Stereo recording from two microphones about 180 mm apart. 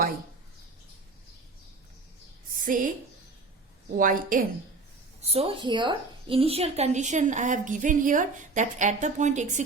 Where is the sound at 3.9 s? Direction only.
50° right (ahead or behind).